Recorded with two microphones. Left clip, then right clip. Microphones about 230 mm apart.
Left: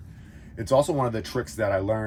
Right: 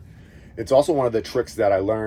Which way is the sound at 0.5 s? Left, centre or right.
Left.